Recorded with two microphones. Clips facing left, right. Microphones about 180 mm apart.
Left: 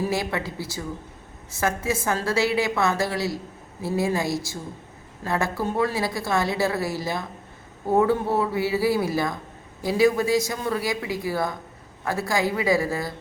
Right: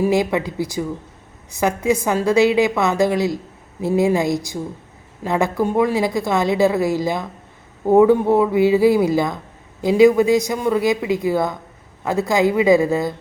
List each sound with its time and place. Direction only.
0.0 s a woman's voice: 15° right (ahead or behind)